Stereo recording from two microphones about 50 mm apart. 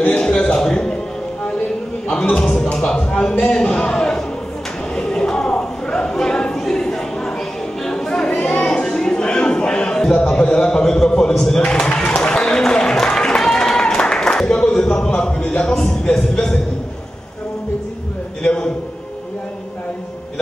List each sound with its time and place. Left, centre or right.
0.0 s a sound: centre
2.0 s a man's voice: centre
4.9 s a sound: centre
7.8 s music: centre
8.5 s a sound: centre
10.2 s speech: centre
11.9 s run: centre
13.0 s applause: centre
14.4 s speech: left
15.0 s speech: left
18.4 s a man's voice: centre